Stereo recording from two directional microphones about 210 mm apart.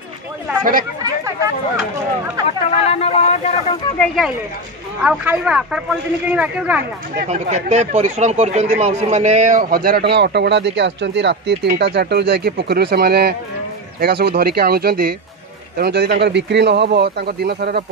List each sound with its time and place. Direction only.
2.8 s speech: 30° left (ahead or behind)
4.0 s speech: centre (ahead or behind)
7.2 s speech: 35° right (ahead or behind)